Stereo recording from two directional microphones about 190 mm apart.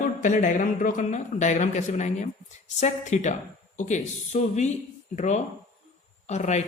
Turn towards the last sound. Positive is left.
turn(degrees=35)  # may be behind; listen again after turning